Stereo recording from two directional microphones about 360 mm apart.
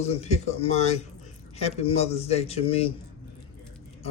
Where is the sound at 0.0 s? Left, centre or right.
Centre.